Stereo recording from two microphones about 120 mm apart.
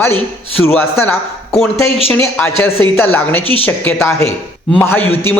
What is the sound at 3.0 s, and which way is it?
A man's voice, 15° left (ahead or behind).